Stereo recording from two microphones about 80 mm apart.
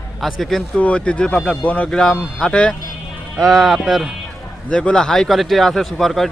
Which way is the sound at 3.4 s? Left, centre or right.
Centre.